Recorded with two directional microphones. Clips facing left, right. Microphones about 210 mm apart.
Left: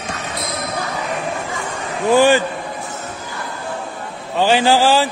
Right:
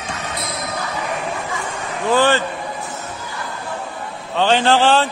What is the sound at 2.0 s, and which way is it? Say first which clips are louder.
Speech: left 4 dB; 10° left (ahead or behind).